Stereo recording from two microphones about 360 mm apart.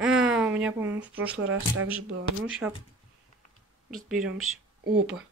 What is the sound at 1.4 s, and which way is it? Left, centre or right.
Speech, right.